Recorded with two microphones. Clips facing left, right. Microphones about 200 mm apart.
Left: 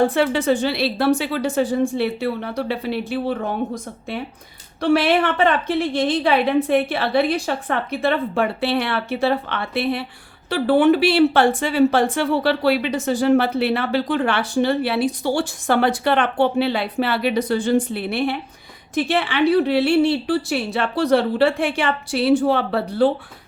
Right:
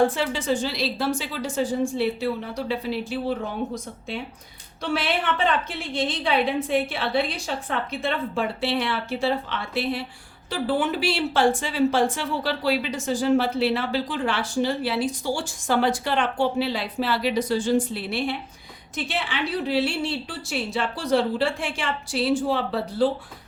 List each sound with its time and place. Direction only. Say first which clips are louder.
0.1 s a woman's voice: left 7 dB; 65° left (ahead or behind)
4.8 s a woman's voice: left 9 dB; 60° left (ahead or behind)